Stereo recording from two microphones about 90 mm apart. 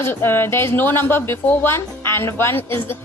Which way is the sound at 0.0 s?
25° left (ahead or behind).